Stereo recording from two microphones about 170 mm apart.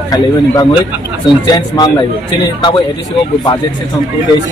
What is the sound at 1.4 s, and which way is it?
Speech, 25° left (ahead or behind).